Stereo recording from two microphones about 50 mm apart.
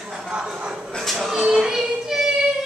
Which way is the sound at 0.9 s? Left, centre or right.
Centre.